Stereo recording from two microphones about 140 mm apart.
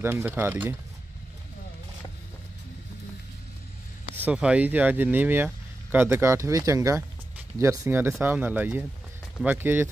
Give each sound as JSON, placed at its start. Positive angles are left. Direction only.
{"t": 0.0, "sound": "speech", "side_deg": -15}
{"t": 4.1, "sound": "speech", "side_deg": -10}